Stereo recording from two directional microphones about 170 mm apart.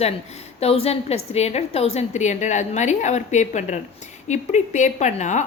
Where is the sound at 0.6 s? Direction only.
35° left (ahead or behind).